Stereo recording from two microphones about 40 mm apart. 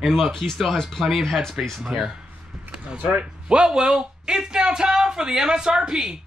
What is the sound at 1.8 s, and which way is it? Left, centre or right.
Speech, centre.